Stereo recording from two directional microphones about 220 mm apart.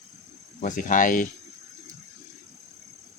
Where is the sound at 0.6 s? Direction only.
35° left (ahead or behind).